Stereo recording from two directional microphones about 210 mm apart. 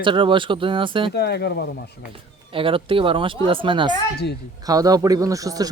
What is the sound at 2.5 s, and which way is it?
A man's voice, 25° right (ahead or behind).